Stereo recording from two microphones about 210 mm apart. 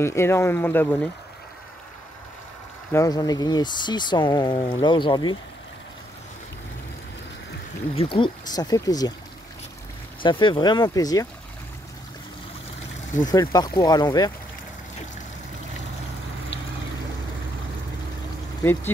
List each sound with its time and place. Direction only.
0.0 s speech: 10° left (ahead or behind)
2.9 s speech: 15° left (ahead or behind)
7.9 s speech: 25° left (ahead or behind)
10.2 s speech: 25° left (ahead or behind)
13.3 s speech: 20° left (ahead or behind)